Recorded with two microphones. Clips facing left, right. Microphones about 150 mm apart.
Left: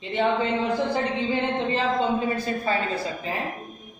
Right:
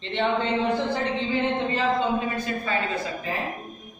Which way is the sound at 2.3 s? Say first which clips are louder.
Left 2 dB; 30° left (ahead or behind).